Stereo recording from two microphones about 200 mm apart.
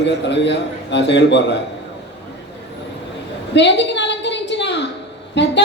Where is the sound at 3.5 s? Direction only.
60° left (ahead or behind).